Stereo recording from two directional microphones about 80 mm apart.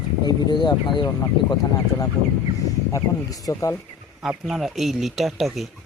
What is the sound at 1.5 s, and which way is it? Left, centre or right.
Speech, left.